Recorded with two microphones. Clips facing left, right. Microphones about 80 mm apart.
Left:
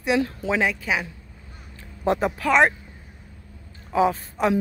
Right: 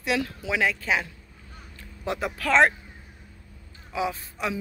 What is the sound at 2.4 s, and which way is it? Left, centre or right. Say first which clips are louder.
Speech: left 1 dB; centre.